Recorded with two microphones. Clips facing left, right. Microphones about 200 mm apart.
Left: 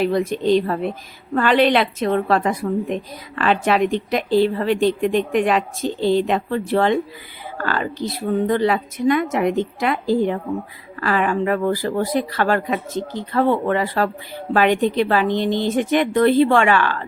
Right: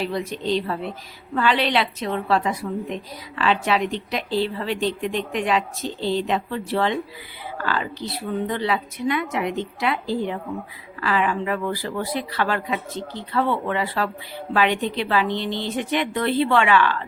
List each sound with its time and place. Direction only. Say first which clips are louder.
0.0 s a woman's voice: left 7 dB; 50° left (ahead or behind)